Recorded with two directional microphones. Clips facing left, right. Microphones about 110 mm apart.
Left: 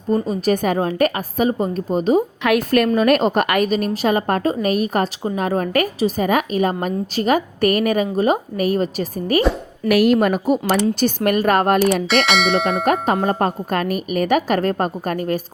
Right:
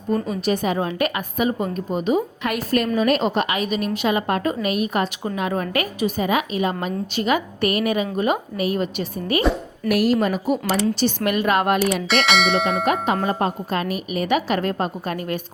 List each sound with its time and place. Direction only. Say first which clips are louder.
0.1 s a woman's voice: left 3 dB; 40° left (ahead or behind)
2.4 s a woman's voice: left 5 dB; 70° left (ahead or behind)
3.7 s a woman's voice: left 3 dB; 40° left (ahead or behind)
9.9 s a woman's voice: left 4 dB; 65° left (ahead or behind); by 11.8 s 45° left (ahead or behind)
12.0 s bell: left 2 dB; centre (ahead or behind)
12.8 s a woman's voice: left 3 dB; 40° left (ahead or behind)